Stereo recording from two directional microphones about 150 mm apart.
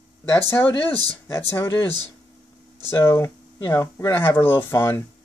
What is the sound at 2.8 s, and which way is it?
Speech, 15° left (ahead or behind).